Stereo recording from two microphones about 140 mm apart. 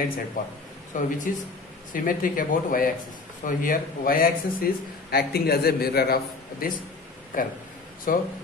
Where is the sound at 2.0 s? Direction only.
90° left.